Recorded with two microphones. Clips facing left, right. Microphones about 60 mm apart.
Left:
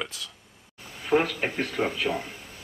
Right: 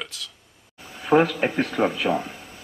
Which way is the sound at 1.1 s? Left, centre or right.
Right.